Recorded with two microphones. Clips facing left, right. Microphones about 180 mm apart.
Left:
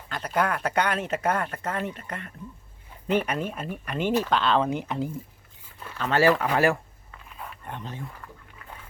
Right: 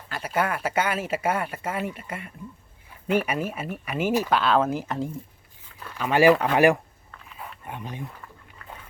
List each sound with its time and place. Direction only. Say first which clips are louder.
0.1 s speech: even; 5° right (ahead or behind)
6.0 s speech: right 3 dB; 15° right (ahead or behind)
7.1 s dog: even; centre (ahead or behind)